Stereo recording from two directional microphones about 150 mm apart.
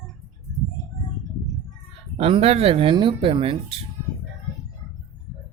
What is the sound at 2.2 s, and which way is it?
Speech, 40° right (ahead or behind).